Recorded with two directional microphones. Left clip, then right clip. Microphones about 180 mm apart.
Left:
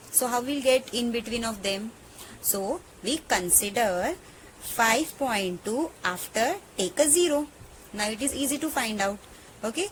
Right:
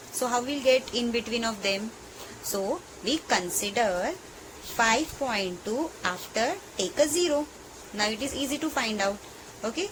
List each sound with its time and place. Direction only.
0.2 s a woman's voice: 35° left (ahead or behind)